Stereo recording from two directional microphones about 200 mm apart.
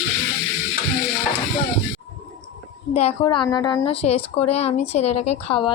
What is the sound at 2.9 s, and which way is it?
A woman's voice, 30° left (ahead or behind).